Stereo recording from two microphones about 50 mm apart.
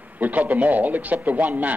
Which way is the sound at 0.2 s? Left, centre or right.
Right.